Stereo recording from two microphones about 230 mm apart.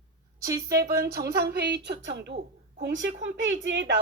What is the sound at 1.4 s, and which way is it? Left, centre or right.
Speech, right.